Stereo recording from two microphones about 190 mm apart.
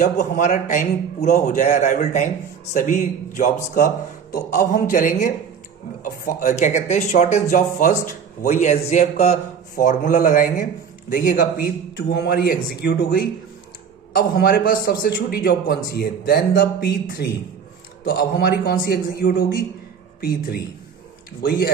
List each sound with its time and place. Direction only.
0.0 s a man's voice: 40° left (ahead or behind)